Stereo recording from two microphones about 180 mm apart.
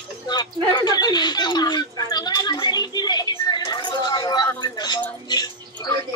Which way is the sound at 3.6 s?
25° left (ahead or behind).